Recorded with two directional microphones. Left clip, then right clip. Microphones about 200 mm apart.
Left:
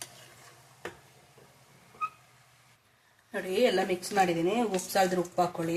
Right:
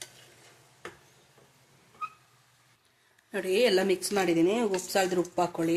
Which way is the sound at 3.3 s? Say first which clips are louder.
Right 2 dB; 55° right (ahead or behind).